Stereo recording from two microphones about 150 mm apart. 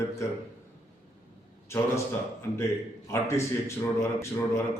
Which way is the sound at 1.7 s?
15° left (ahead or behind).